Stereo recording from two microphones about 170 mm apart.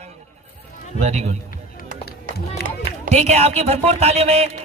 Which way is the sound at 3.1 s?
40° right (ahead or behind).